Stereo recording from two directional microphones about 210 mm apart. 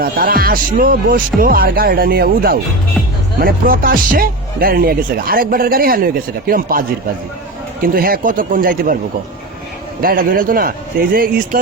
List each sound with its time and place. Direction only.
0.0 s speech: 45° right (ahead or behind)
10.0 s speech: 40° right (ahead or behind)